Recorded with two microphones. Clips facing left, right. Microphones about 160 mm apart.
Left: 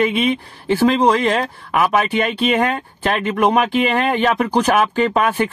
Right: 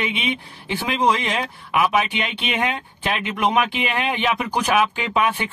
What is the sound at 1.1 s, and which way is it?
Speech, 55° left (ahead or behind).